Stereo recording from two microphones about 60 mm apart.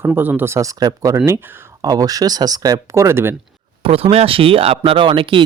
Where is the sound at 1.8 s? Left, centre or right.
Right.